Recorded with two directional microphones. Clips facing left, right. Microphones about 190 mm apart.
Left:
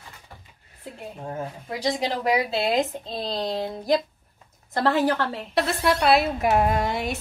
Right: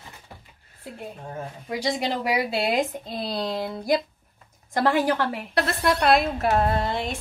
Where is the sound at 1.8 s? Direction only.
10° right (ahead or behind).